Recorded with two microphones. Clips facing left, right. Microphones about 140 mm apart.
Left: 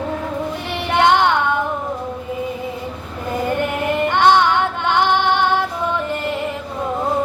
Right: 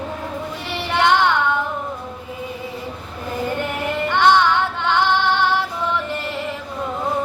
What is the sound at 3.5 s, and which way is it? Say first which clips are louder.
Female singing: left 4 dB; 15° left (ahead or behind).